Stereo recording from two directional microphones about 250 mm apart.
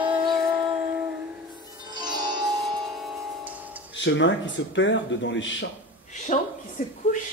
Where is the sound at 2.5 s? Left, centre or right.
Centre.